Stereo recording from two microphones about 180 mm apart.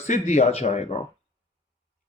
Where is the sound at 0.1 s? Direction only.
40° left (ahead or behind).